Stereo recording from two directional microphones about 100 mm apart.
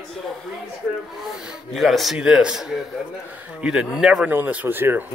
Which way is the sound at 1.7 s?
Centre (ahead or behind).